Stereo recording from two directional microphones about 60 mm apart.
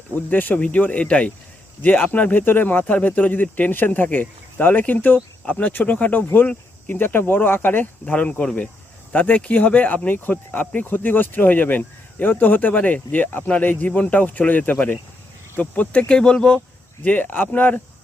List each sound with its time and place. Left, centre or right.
0.3 s speech: left; by 16.6 s centre
17.0 s speech: left